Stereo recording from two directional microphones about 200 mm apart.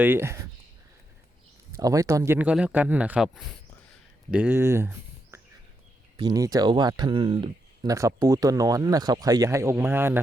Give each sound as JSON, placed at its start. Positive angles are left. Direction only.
{"t": 0.0, "sound": "speech", "side_deg": -10}
{"t": 1.7, "sound": "speech", "side_deg": -15}